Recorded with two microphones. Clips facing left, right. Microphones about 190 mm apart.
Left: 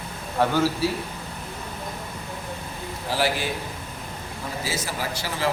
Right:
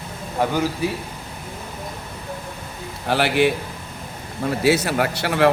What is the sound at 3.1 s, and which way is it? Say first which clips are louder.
A man's voice: right 7 dB; 65° right (ahead or behind).